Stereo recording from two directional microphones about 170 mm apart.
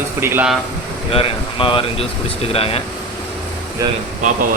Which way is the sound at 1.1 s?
30° left (ahead or behind).